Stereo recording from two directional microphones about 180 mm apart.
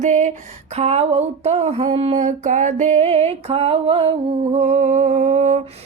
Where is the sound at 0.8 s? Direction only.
35° right (ahead or behind).